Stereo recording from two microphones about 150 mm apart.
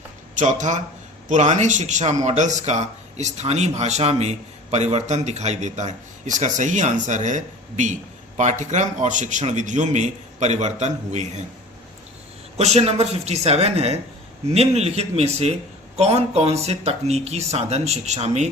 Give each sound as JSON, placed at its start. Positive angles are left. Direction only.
{"t": 0.3, "sound": "a man's voice", "side_deg": -55}
{"t": 12.5, "sound": "a man's voice", "side_deg": -45}